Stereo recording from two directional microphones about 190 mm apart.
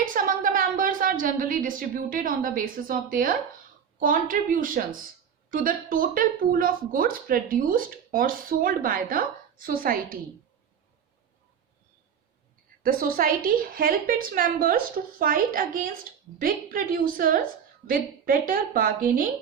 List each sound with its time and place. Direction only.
0.0 s a woman's voice: 45° right (ahead or behind)
12.8 s speech: 50° right (ahead or behind)